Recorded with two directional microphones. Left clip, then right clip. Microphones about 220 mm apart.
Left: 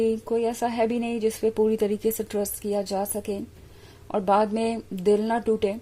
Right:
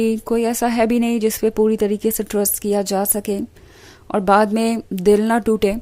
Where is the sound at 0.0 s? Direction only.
30° right (ahead or behind).